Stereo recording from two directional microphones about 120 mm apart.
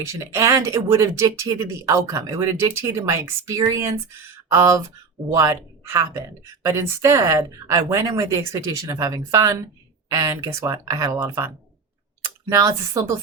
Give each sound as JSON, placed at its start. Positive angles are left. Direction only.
{"t": 0.0, "sound": "a woman's voice", "side_deg": -25}
{"t": 5.3, "sound": "a woman's voice", "side_deg": -30}